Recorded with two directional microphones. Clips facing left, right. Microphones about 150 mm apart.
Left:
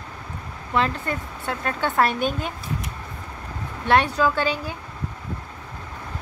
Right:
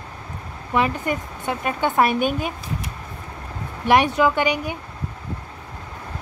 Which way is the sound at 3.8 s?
15° right (ahead or behind).